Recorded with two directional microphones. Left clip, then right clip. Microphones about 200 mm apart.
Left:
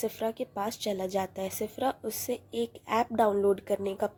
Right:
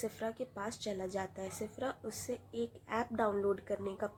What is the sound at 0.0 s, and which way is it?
A woman's voice, 20° left (ahead or behind).